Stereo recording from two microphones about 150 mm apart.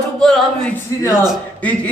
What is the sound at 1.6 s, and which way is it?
Speech, 10° left (ahead or behind).